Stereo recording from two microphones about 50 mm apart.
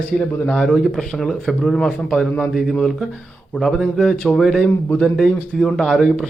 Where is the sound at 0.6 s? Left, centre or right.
Centre.